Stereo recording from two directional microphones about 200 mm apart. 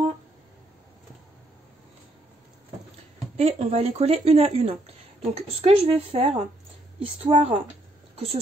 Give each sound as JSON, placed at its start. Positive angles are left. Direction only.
{"t": 3.3, "sound": "a woman's voice", "side_deg": -30}